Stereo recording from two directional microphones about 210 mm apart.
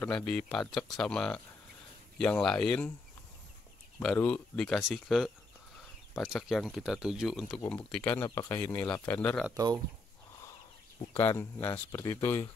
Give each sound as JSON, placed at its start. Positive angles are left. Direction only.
{"t": 0.0, "sound": "speech", "side_deg": 5}
{"t": 4.0, "sound": "speech", "side_deg": 5}
{"t": 9.5, "sound": "speech", "side_deg": -15}
{"t": 11.2, "sound": "speech", "side_deg": 10}